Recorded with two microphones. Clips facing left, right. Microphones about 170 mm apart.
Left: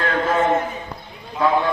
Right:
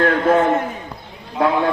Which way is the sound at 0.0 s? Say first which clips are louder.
Right 5 dB; 60° right (ahead or behind).